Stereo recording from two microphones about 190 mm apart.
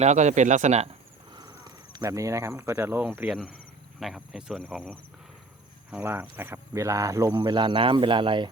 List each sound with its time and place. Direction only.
0.0 s speech: 40° right (ahead or behind)
1.3 s speech: 20° right (ahead or behind); by 4.9 s centre (ahead or behind)
5.9 s speech: 10° right (ahead or behind)